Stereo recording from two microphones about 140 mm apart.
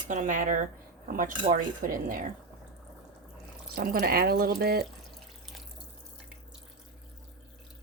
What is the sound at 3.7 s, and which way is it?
Speech, 90° right.